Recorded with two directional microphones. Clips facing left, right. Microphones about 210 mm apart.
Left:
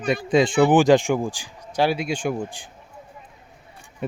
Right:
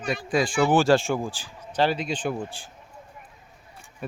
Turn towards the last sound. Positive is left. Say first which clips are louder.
# left 6 dB
turn(degrees=25)  # may be behind; listen again after turning